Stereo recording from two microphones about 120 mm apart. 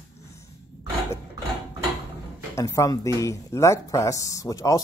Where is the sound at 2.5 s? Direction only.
25° left (ahead or behind).